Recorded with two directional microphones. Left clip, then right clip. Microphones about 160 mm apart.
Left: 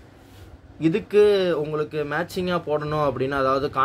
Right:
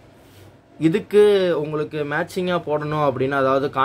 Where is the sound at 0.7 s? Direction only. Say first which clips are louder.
Right 3 dB; 20° right (ahead or behind).